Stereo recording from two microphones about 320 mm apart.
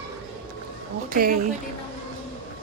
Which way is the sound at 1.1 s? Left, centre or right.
Right.